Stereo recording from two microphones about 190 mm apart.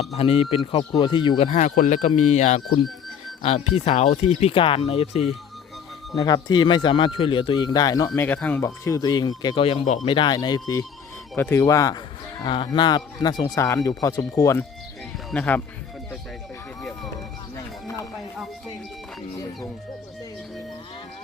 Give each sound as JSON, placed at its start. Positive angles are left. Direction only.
{"t": 0.0, "sound": "speech", "side_deg": 35}
{"t": 1.5, "sound": "speech", "side_deg": 40}
{"t": 6.1, "sound": "speech", "side_deg": 20}
{"t": 9.8, "sound": "speech", "side_deg": 40}
{"t": 10.1, "sound": "speech", "side_deg": 25}